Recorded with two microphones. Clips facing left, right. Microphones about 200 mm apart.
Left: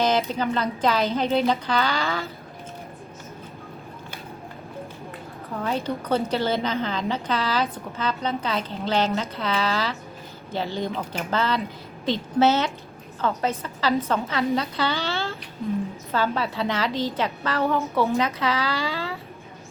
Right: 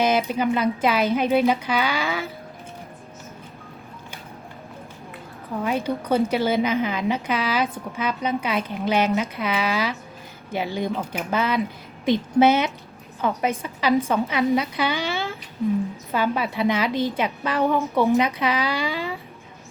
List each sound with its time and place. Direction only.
0.0 s a woman's voice: 10° right (ahead or behind)
5.6 s a woman's voice: 10° right (ahead or behind)